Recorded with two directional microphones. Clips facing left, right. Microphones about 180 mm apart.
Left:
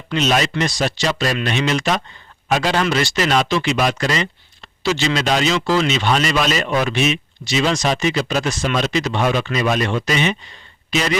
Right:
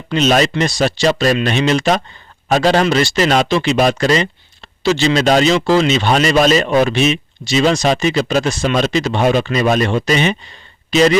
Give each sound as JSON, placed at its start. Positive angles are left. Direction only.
{"t": 0.1, "sound": "speech", "side_deg": -35}
{"t": 5.5, "sound": "speech", "side_deg": -30}
{"t": 7.0, "sound": "speech", "side_deg": -30}